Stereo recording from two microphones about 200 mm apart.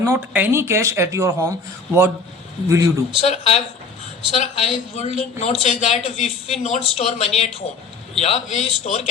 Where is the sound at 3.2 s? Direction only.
30° left (ahead or behind).